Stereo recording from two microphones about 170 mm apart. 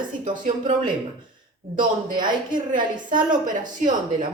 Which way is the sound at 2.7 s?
50° right (ahead or behind).